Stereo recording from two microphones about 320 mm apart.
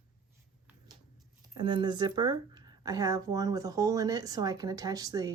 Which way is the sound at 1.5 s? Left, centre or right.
Centre.